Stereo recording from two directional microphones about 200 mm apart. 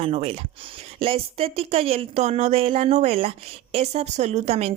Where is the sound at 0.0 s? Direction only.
30° right (ahead or behind).